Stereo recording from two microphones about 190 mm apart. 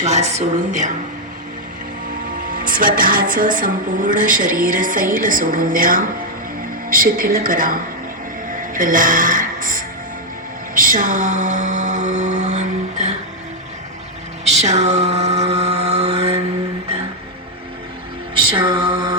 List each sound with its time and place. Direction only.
0.0 s speech: 35° right (ahead or behind)
2.5 s music: 45° right (ahead or behind)
14.4 s mantra: 35° right (ahead or behind)
18.3 s music: 25° right (ahead or behind)